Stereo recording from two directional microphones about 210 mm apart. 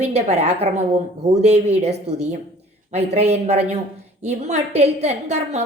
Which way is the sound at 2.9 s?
30° right (ahead or behind).